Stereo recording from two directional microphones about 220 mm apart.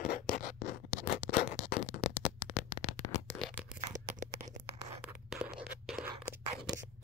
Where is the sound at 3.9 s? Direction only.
30° right (ahead or behind).